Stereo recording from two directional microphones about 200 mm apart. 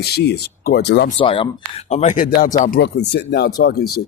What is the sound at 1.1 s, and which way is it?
Speech, 25° left (ahead or behind).